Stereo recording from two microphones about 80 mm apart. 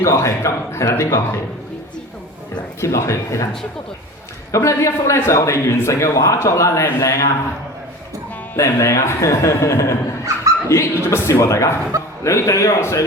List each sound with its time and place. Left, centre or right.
0.0 s a man's voice: left
2.8 s a man's voice: left
4.5 s a man's voice: left
8.5 s a man's voice: left